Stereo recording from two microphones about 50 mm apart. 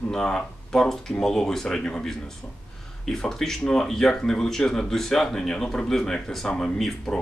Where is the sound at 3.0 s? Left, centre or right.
Centre.